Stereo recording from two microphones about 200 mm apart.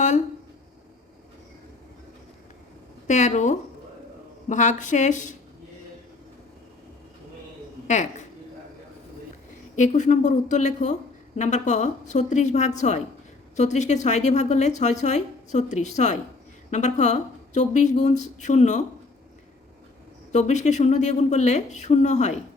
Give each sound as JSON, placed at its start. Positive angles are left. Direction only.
{"t": 3.1, "sound": "a woman's voice", "side_deg": 35}
{"t": 9.7, "sound": "a woman's voice", "side_deg": 40}
{"t": 20.3, "sound": "a woman's voice", "side_deg": 35}